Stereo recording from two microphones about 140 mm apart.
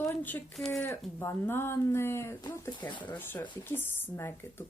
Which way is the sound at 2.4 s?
30° left (ahead or behind).